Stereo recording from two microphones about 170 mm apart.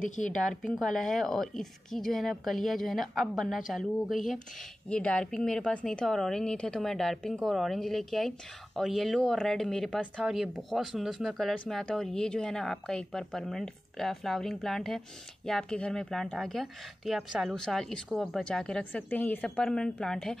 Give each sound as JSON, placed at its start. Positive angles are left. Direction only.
{"t": 0.0, "sound": "speech", "side_deg": 50}
{"t": 0.3, "sound": "speech", "side_deg": 5}